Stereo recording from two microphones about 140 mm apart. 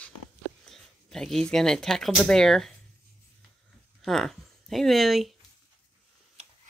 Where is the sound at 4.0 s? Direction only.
Centre (ahead or behind).